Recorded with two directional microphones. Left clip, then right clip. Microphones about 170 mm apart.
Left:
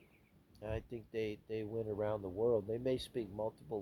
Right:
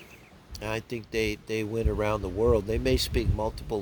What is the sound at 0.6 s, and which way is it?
Speech, 45° right (ahead or behind).